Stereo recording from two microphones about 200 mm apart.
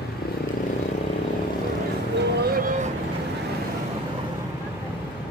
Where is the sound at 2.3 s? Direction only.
45° right (ahead or behind).